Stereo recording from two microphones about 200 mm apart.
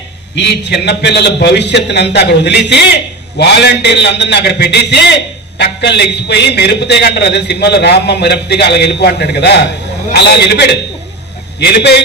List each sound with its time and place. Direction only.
0.3 s a man's voice: 55° left (ahead or behind)